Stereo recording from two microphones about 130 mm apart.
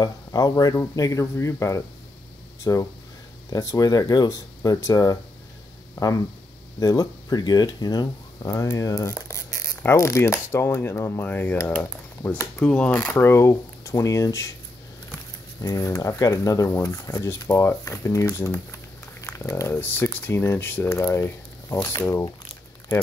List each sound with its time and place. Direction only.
0.0 s speech: 30° left (ahead or behind); by 12.9 s 10° left (ahead or behind)
12.9 s speech: 20° left (ahead or behind)
15.6 s speech: 25° left (ahead or behind)